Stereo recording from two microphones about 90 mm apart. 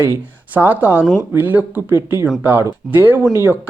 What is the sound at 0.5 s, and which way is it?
Speech, 20° right (ahead or behind).